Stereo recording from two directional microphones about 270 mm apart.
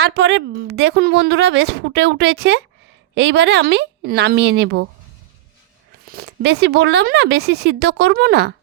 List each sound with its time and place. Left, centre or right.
0.0 s speech: right
6.1 s speech: right